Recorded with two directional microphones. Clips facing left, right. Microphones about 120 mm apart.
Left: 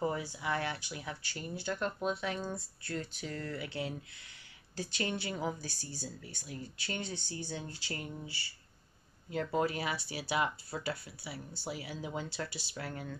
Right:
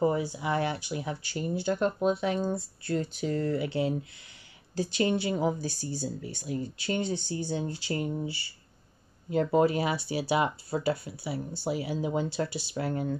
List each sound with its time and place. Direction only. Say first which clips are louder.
0.0 s speech: right 8 dB; 15° right (ahead or behind)
8.3 s speech: right 8 dB; 20° right (ahead or behind)